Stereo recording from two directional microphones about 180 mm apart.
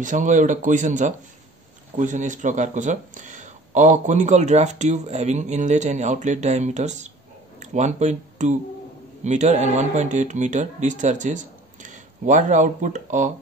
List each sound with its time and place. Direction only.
0.0 s speech: 45° right (ahead or behind)